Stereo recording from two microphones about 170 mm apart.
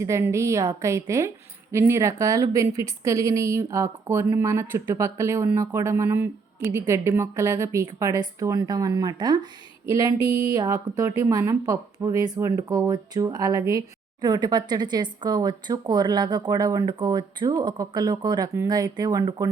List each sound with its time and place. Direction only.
0.0 s a woman's voice: 15° right (ahead or behind)